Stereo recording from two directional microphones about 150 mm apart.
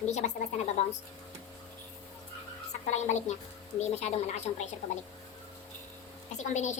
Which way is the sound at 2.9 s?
50° left (ahead or behind).